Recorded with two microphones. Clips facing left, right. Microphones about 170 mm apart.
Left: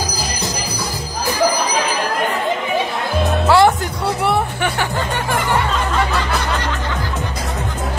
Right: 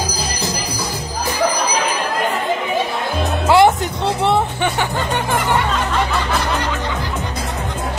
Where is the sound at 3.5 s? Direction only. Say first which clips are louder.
Right 2 dB; 20° right (ahead or behind).